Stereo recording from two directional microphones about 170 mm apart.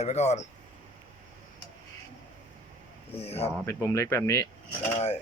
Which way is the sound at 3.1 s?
35° left (ahead or behind).